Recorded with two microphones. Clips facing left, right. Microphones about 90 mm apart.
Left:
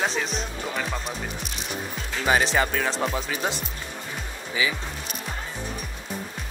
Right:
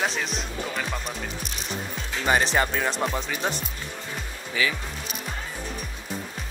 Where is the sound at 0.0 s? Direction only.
Centre (ahead or behind).